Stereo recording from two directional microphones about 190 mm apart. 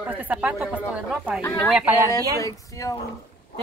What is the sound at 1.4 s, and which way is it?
Speech, 15° left (ahead or behind).